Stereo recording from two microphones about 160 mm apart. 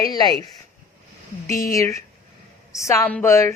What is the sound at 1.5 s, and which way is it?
A woman's voice, 20° left (ahead or behind).